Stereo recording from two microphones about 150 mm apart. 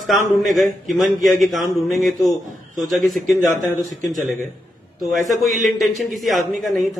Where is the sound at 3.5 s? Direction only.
60° right (ahead or behind).